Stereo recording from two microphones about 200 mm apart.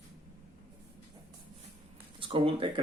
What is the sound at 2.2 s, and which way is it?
Speech, 30° right (ahead or behind).